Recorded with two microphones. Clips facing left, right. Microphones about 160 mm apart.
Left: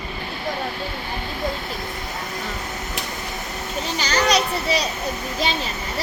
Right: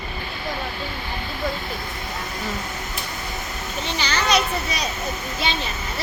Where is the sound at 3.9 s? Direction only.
40° left (ahead or behind).